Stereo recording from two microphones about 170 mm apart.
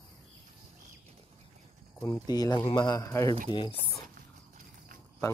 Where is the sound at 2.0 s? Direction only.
20° left (ahead or behind).